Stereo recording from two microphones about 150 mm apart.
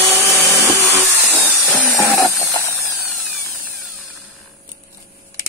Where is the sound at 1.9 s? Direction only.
20° left (ahead or behind).